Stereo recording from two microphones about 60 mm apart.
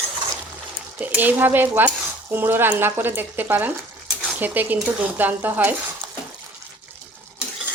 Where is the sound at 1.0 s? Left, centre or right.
Right.